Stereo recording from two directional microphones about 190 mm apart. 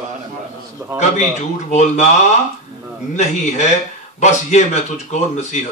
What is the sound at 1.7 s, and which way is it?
Speech, 40° left (ahead or behind).